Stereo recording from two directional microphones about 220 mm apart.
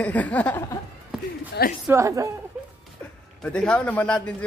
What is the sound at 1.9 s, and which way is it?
Speech, 15° right (ahead or behind).